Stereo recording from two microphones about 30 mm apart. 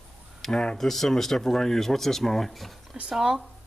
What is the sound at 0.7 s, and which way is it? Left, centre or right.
Speech, centre.